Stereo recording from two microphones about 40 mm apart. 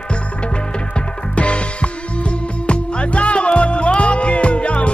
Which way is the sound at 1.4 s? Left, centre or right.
Left.